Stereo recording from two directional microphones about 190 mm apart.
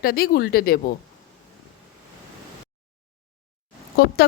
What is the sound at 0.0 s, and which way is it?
Speech, 55° left (ahead or behind).